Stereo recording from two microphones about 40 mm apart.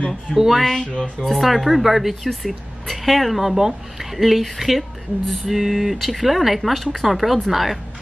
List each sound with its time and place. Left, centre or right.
0.4 s speech: centre